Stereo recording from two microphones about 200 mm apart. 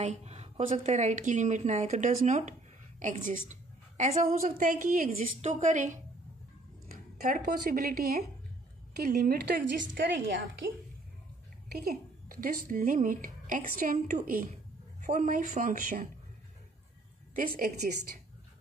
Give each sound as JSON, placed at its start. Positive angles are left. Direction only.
{"t": 0.0, "sound": "a woman's voice", "side_deg": -35}
{"t": 11.7, "sound": "a woman's voice", "side_deg": -50}
{"t": 17.4, "sound": "a woman's voice", "side_deg": -45}